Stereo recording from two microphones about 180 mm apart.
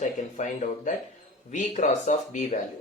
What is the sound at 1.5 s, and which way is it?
Speech, 40° left (ahead or behind).